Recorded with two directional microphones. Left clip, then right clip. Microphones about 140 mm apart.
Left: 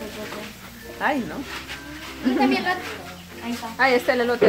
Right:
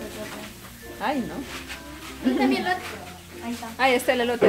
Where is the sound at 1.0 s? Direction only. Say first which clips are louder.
Left 4 dB; 5° left (ahead or behind).